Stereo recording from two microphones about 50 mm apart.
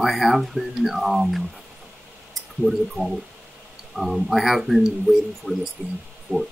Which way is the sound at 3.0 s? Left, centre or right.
Left.